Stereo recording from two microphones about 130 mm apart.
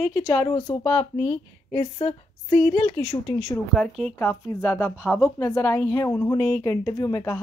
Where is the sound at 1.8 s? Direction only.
50° left (ahead or behind).